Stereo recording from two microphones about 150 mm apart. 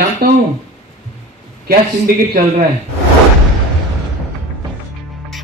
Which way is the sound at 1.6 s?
70° right (ahead or behind).